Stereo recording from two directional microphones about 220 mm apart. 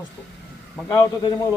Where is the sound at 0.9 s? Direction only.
15° left (ahead or behind).